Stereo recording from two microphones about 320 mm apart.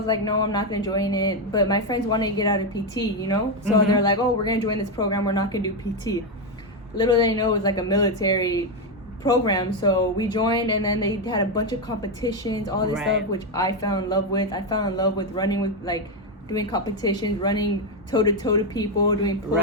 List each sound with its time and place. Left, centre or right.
0.4 s speech: centre